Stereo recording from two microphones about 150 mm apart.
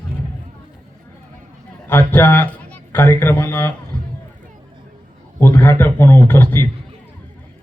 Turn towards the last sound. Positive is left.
turn(degrees=15)  # may be behind; listen again after turning